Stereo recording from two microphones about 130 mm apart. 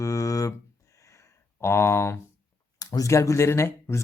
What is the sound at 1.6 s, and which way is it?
Speech, 20° left (ahead or behind).